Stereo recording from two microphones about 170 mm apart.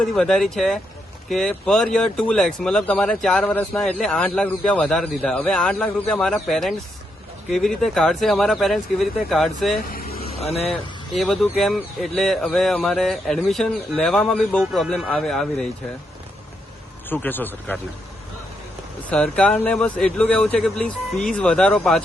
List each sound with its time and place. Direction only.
0.0 s speech: centre (ahead or behind)
9.9 s vehicle: 60° left (ahead or behind)
10.4 s speech: 40° left (ahead or behind)
10.7 s speech: centre (ahead or behind)
17.1 s speech: 10° left (ahead or behind)
19.1 s speech: 5° left (ahead or behind)